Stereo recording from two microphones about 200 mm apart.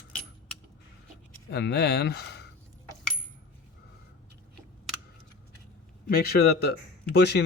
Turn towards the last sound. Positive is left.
turn(degrees=55)  # may be behind; listen again after turning